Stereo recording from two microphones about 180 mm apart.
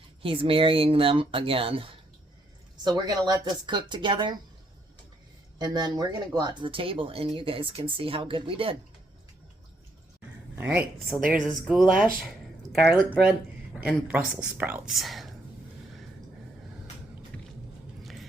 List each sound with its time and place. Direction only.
0.2 s speech: 30° right (ahead or behind)
5.5 s speech: 20° right (ahead or behind)
10.5 s speech: 10° right (ahead or behind)
12.8 s a woman's voice: 5° right (ahead or behind)
18.0 s clip-clop: centre (ahead or behind)